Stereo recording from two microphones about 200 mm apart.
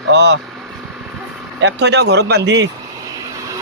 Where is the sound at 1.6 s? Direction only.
60° right (ahead or behind).